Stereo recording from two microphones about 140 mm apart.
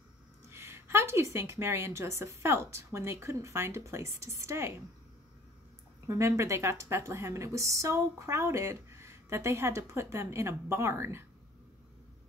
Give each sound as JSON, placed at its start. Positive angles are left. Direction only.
{"t": 0.5, "sound": "a woman's voice", "side_deg": -20}
{"t": 6.0, "sound": "a woman's voice", "side_deg": -20}